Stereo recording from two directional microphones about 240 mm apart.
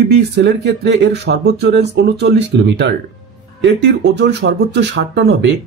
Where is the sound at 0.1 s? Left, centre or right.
Right.